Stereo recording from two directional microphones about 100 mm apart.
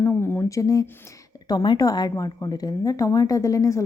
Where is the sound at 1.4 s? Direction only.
45° left (ahead or behind).